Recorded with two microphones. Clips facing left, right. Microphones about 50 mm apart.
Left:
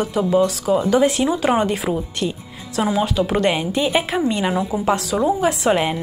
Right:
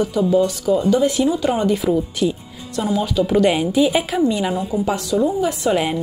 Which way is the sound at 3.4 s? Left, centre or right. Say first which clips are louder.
Right 3 dB; centre.